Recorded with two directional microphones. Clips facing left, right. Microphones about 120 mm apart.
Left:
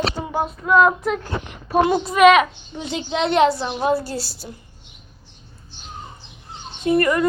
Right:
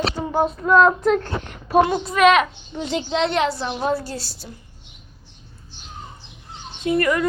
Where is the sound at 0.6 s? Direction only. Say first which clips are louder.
Even; 5° left (ahead or behind).